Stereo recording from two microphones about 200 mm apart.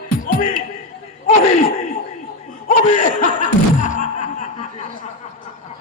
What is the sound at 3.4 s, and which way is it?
Music, 40° left (ahead or behind).